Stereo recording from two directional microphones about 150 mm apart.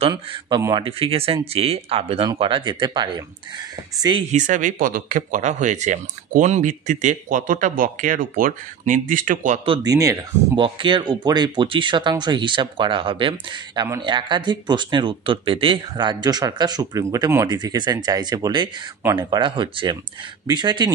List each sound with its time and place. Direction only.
0.1 s speech: 30° right (ahead or behind)
0.8 s speech: 35° right (ahead or behind)
4.3 s speech: 55° right (ahead or behind)
9.7 s speech: 25° right (ahead or behind)
10.5 s speech: 35° right (ahead or behind)